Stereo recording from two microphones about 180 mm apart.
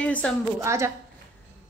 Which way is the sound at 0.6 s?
15° right (ahead or behind).